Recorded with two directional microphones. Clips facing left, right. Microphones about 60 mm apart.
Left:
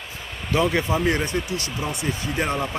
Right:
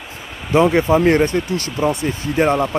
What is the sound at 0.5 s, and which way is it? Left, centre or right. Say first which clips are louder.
Speech: right 8 dB; right.